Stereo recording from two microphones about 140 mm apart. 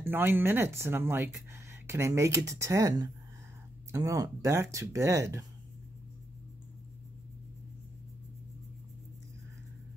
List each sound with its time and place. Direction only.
0.0 s speech: 15° right (ahead or behind)